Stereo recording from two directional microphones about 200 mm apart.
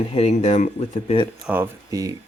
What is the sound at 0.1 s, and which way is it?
Speech, 30° left (ahead or behind).